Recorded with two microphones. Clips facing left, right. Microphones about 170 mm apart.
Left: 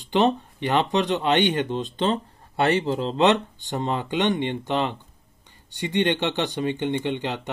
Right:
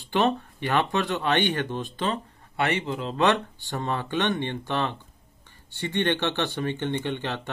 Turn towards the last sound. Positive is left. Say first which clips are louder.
# left 3 dB
turn(degrees=15)  # may be behind; listen again after turning